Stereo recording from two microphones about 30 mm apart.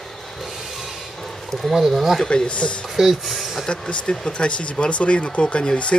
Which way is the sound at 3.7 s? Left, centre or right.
Left.